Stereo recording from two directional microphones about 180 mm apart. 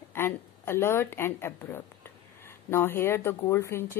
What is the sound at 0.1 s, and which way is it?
A woman's voice, 15° left (ahead or behind).